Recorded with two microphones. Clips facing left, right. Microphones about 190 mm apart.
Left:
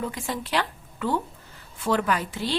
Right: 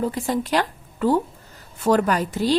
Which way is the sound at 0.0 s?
35° right (ahead or behind).